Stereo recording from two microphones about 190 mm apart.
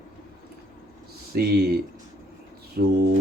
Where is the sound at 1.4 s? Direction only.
55° right (ahead or behind).